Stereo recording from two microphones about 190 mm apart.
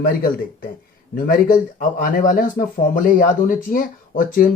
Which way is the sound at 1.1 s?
45° left (ahead or behind).